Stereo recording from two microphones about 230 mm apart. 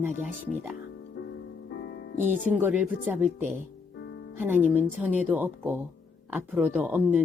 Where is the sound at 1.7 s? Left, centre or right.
Left.